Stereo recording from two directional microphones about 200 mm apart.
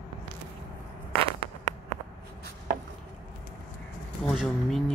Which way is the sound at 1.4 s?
35° right (ahead or behind).